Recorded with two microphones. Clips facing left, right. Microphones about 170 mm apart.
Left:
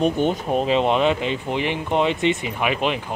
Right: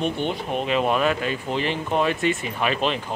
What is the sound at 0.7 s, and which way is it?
Speech, 25° left (ahead or behind).